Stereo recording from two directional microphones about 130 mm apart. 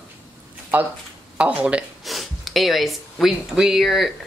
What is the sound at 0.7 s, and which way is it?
Speech, 15° right (ahead or behind).